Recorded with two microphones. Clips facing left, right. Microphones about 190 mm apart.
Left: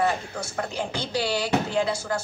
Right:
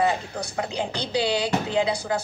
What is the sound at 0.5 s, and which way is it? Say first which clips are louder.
Speech: right 1 dB; 15° right (ahead or behind).